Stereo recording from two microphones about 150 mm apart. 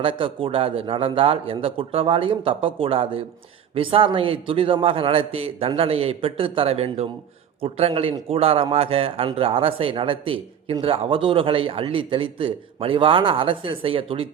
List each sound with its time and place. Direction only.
0.0 s speech: 35° right (ahead or behind)